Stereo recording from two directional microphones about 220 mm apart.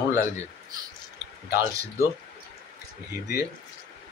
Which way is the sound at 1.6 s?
15° right (ahead or behind).